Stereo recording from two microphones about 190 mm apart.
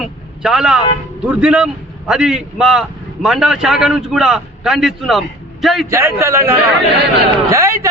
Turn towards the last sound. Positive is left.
turn(degrees=-15)  # may be behind; listen again after turning